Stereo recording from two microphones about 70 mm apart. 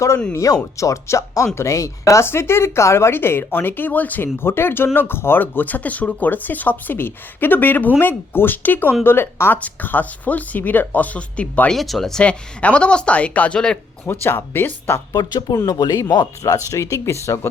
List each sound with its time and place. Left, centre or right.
0.3 s speech: left
2.2 s speech: left
11.7 s speech: centre
12.2 s speech: centre
14.1 s speech: left
15.1 s speech: left
15.6 s speech: left